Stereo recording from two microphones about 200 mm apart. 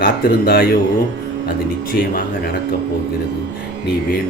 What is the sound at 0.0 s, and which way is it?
Speech, 50° left (ahead or behind).